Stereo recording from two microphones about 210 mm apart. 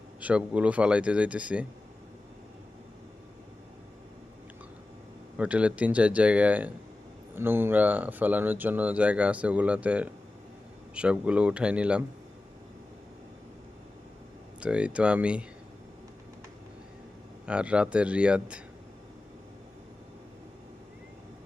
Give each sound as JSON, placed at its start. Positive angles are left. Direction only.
{"t": 0.2, "sound": "speech", "side_deg": -5}
{"t": 5.4, "sound": "speech", "side_deg": -5}
{"t": 14.6, "sound": "speech", "side_deg": -5}
{"t": 17.4, "sound": "speech", "side_deg": -5}